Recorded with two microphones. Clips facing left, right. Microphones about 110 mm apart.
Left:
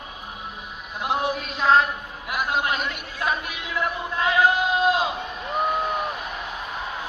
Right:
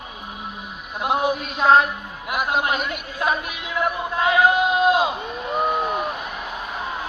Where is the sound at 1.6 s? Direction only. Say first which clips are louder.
Right 3 dB; 25° right (ahead or behind).